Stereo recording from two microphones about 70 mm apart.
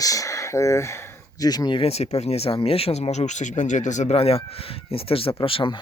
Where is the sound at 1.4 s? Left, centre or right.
Left.